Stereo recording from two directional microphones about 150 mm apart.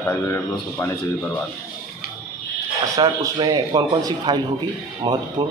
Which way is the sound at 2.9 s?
25° right (ahead or behind).